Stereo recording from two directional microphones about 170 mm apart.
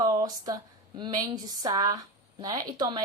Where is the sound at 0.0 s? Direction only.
25° right (ahead or behind).